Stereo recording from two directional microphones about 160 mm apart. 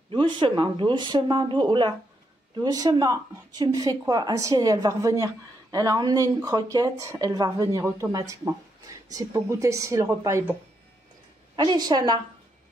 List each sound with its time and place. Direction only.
0.1 s a woman's voice: 30° right (ahead or behind)
11.5 s a woman's voice: 25° right (ahead or behind)